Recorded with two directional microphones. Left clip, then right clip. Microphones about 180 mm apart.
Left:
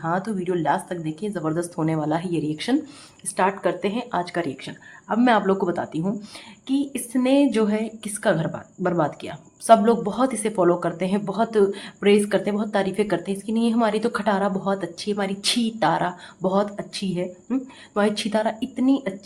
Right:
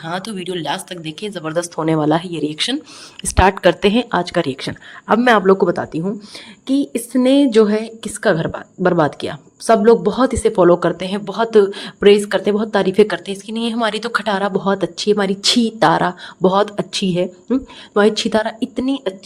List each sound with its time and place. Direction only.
0.0 s a woman's voice: 50° right (ahead or behind)
5.2 s a woman's voice: 30° right (ahead or behind)
9.6 s a woman's voice: 25° right (ahead or behind)